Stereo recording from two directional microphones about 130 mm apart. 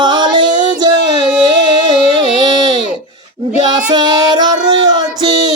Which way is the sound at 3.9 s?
35° right (ahead or behind).